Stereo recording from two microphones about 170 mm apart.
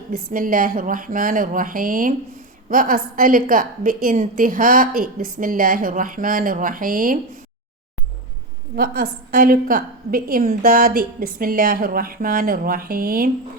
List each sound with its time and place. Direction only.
0.1 s a woman's voice: 55° right (ahead or behind)
8.7 s a woman's voice: 60° right (ahead or behind)